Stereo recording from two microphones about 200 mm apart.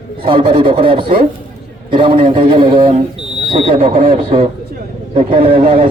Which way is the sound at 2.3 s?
45° right (ahead or behind).